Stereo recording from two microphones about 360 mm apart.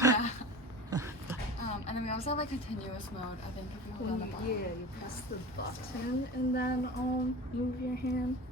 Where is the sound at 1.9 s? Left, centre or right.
Centre.